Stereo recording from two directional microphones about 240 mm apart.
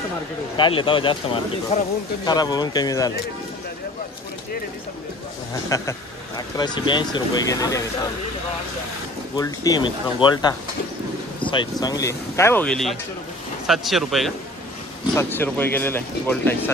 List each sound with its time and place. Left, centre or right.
0.6 s speech: left
5.7 s speech: centre
9.4 s speech: centre
11.5 s speech: centre